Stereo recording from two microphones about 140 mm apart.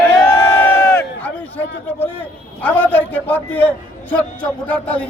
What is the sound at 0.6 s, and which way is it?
A man's voice, 10° left (ahead or behind).